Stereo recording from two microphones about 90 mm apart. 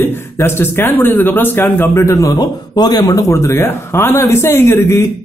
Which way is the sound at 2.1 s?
45° left (ahead or behind).